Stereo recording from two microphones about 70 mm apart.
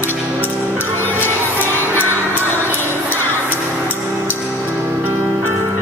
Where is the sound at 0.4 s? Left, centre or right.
Left.